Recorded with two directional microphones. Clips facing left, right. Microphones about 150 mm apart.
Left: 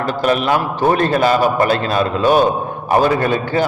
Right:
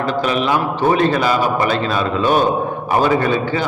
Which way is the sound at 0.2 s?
45° left (ahead or behind).